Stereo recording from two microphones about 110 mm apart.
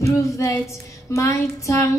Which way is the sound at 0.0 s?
30° left (ahead or behind).